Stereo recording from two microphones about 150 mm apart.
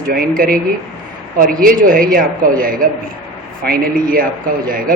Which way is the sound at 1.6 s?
70° right (ahead or behind).